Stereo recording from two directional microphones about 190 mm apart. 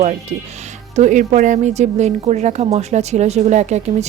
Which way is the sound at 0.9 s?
40° right (ahead or behind).